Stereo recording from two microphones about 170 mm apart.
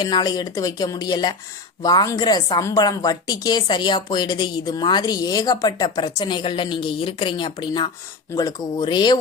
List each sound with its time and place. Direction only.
0.0 s a woman's voice: 25° left (ahead or behind)